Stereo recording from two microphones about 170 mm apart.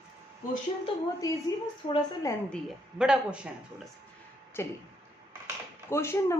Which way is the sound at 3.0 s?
5° right (ahead or behind).